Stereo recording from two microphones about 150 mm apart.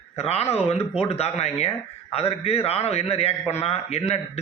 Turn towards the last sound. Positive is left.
turn(degrees=45)  # may be behind; listen again after turning